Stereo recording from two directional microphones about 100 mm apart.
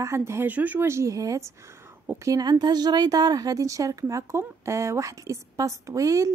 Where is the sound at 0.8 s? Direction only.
30° right (ahead or behind).